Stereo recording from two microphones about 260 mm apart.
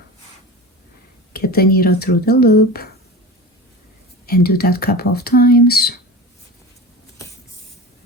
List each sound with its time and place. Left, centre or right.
1.3 s speech: left
4.3 s speech: left